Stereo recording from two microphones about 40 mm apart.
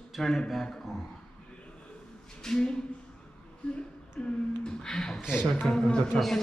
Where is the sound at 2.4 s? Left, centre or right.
Centre.